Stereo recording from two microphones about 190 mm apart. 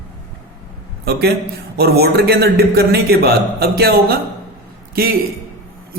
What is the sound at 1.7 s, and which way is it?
A man's voice, 55° right (ahead or behind).